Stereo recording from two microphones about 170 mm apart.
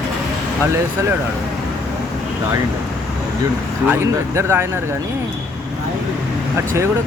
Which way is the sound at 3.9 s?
15° right (ahead or behind).